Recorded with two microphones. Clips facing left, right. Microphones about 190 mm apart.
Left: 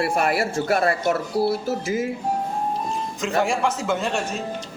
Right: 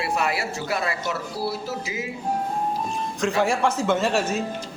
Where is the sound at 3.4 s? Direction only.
Centre (ahead or behind).